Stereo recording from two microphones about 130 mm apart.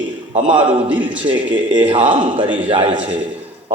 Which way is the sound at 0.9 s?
10° right (ahead or behind).